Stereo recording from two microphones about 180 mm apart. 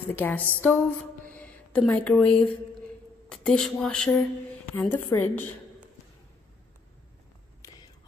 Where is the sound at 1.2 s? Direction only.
10° left (ahead or behind).